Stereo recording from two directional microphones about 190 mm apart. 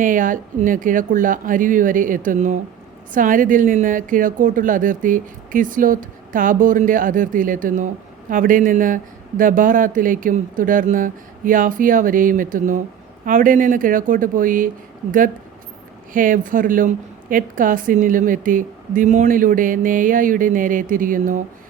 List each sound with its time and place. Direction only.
0.0 s a woman's voice: 45° right (ahead or behind)
16.1 s a woman's voice: 45° right (ahead or behind)